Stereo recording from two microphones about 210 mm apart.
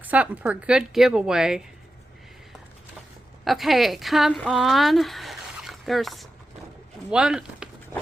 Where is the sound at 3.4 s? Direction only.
Centre (ahead or behind).